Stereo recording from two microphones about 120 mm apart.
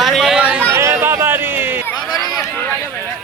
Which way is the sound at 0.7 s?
25° right (ahead or behind).